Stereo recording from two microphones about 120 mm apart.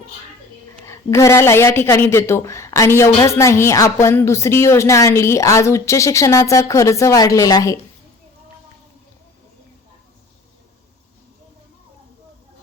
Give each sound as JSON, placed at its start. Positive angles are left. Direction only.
{"t": 0.9, "sound": "a woman's voice", "side_deg": 20}